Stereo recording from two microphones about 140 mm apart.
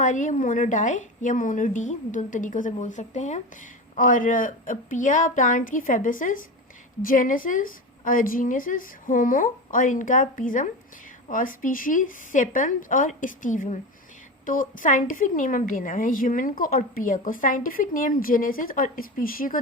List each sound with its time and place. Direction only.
0.0 s a woman's voice: 60° left (ahead or behind)
3.9 s a woman's voice: 75° left (ahead or behind); by 19.5 s 90° left